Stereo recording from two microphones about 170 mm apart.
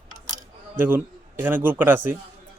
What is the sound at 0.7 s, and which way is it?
A man's voice, 10° right (ahead or behind).